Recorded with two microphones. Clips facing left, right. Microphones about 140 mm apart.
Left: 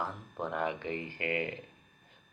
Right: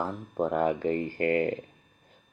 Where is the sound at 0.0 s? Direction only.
40° right (ahead or behind).